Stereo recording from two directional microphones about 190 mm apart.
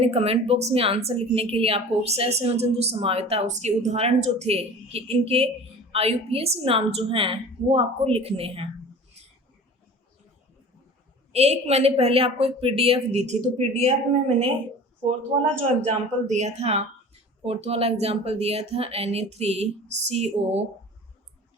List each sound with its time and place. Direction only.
0.0 s a woman's voice: 30° right (ahead or behind)
11.3 s speech: 35° right (ahead or behind)
16.2 s speech: 35° right (ahead or behind)